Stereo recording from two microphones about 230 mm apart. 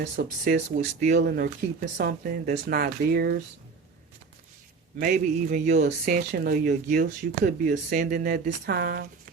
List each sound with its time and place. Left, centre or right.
0.0 s speech: right
0.8 s speech: right
4.9 s speech: right